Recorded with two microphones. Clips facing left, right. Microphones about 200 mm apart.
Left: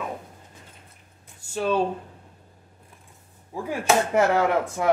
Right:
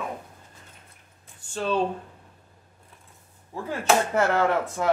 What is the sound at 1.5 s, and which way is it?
Speech, 5° left (ahead or behind).